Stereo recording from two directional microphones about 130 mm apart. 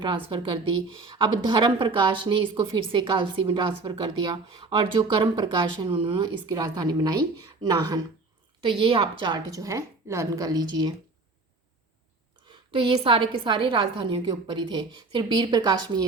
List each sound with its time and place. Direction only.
0.0 s a woman's voice: 40° right (ahead or behind)
8.6 s a woman's voice: 45° right (ahead or behind)
12.5 s a woman's voice: 40° right (ahead or behind)